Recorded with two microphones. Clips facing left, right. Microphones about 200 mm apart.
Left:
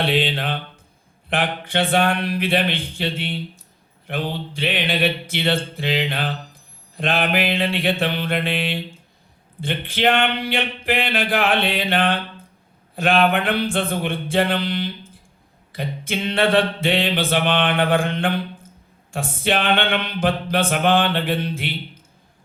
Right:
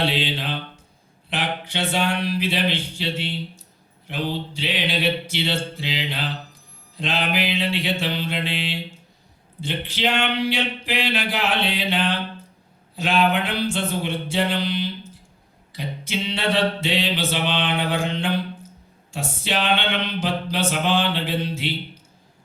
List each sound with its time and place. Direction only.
0.0 s mantra: 55° left (ahead or behind)